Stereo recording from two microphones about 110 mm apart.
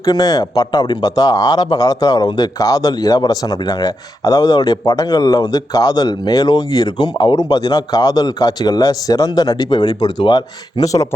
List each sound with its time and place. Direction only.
0.0 s speech: 35° left (ahead or behind)